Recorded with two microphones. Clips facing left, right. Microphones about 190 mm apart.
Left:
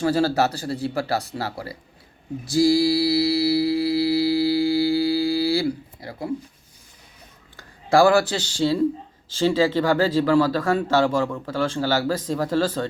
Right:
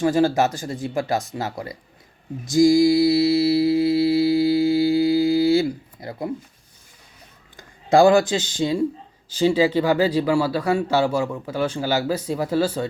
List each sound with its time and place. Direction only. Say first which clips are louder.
0.0 s speech: right 2 dB; 15° right (ahead or behind)
2.5 s mantra: right 3 dB; 15° right (ahead or behind)
7.5 s speech: right 2 dB; 20° right (ahead or behind)